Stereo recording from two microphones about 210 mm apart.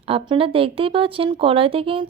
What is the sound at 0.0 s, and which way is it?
A woman's voice, 25° right (ahead or behind).